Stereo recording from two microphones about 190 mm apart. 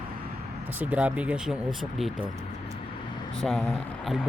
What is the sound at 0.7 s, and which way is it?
Speech, 5° right (ahead or behind).